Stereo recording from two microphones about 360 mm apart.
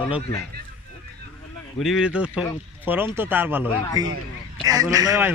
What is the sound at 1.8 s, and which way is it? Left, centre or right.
A man's voice, centre.